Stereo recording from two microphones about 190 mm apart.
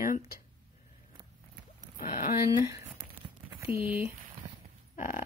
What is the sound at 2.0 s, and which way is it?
Speech, 40° left (ahead or behind).